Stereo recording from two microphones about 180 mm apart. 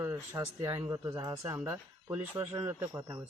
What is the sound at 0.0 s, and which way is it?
Speech, 15° right (ahead or behind).